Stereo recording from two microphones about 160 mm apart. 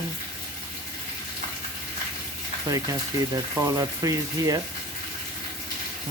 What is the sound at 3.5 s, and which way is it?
Speech, 20° right (ahead or behind).